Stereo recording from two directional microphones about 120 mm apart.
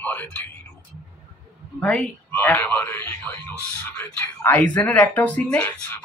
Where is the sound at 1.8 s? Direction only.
5° left (ahead or behind).